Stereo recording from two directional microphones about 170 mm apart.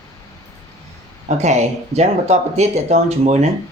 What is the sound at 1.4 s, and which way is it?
Speech, 40° right (ahead or behind).